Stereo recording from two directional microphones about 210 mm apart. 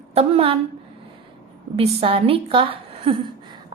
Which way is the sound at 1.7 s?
25° right (ahead or behind).